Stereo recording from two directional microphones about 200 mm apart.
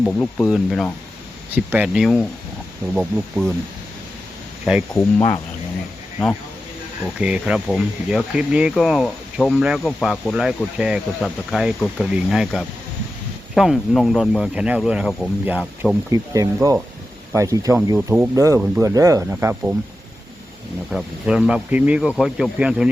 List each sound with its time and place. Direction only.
0.0 s speech: 10° left (ahead or behind)
7.2 s speech: 5° right (ahead or behind)
20.9 s speech: 5° right (ahead or behind)